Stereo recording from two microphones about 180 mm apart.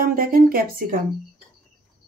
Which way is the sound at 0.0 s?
50° right (ahead or behind).